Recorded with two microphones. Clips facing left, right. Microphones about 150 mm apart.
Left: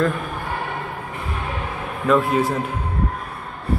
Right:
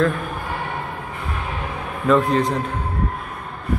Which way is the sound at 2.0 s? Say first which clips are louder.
Right 1 dB; 5° left (ahead or behind).